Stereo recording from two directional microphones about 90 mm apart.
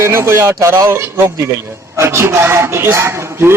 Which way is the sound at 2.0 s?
30° right (ahead or behind).